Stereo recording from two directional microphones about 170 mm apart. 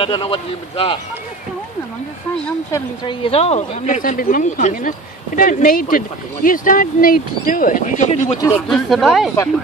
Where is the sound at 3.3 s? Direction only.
35° left (ahead or behind).